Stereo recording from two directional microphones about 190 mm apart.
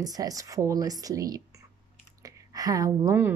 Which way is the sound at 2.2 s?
20° right (ahead or behind).